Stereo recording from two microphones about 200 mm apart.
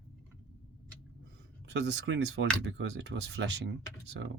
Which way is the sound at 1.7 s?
60° right (ahead or behind).